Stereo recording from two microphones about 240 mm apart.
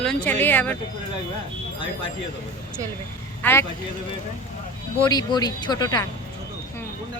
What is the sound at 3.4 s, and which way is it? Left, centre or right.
Speech, centre.